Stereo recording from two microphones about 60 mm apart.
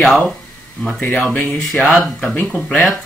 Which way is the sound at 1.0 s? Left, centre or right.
Left.